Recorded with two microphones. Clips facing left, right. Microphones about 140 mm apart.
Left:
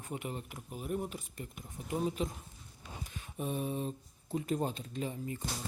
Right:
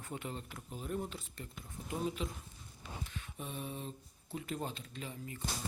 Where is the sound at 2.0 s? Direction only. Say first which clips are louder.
Left 3 dB; 40° left (ahead or behind).